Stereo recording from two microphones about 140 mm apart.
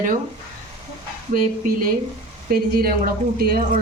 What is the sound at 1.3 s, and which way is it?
A woman's voice, 90° right.